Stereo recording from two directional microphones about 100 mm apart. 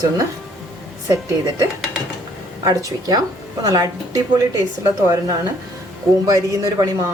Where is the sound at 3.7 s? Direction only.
35° right (ahead or behind).